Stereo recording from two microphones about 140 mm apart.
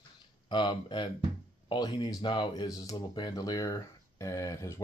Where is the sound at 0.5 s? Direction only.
35° left (ahead or behind).